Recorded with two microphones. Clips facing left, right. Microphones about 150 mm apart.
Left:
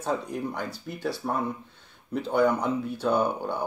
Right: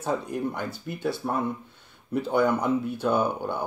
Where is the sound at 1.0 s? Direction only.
Centre (ahead or behind).